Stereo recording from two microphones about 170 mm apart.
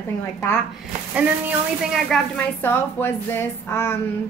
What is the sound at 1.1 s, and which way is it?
Speech, 10° right (ahead or behind).